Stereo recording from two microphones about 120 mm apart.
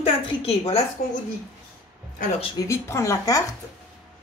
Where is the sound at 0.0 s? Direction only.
50° left (ahead or behind).